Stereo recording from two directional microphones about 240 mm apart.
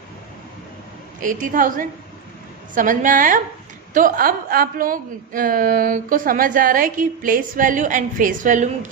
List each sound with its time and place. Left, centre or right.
1.2 s a woman's voice: right